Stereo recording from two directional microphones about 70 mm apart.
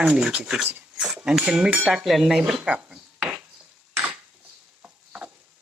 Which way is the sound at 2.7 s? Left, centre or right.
Centre.